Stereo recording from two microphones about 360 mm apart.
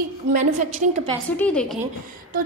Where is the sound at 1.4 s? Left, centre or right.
Centre.